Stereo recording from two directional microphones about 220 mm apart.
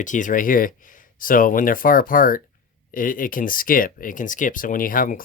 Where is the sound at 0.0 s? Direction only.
35° left (ahead or behind).